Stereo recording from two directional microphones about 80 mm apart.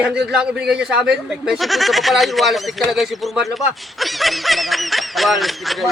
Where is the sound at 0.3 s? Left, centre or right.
Centre.